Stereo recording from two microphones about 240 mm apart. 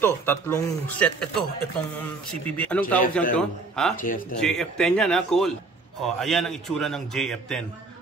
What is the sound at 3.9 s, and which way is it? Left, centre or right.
Speech, left.